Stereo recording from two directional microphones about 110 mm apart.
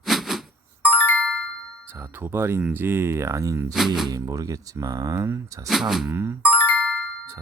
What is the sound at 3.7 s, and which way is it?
Speech, centre (ahead or behind).